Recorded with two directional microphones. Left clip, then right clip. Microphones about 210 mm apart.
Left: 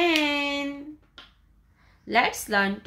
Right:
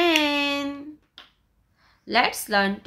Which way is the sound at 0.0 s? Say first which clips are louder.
Right 2 dB; 15° right (ahead or behind).